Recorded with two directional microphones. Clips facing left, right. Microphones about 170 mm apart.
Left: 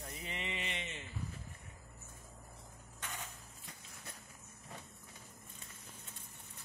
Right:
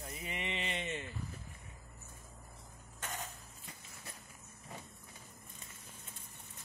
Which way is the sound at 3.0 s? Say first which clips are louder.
Right 3 dB; 40° right (ahead or behind).